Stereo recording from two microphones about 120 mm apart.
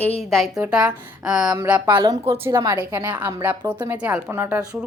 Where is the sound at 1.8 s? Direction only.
35° right (ahead or behind).